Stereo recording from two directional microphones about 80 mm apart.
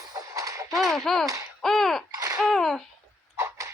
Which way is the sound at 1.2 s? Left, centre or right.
Right.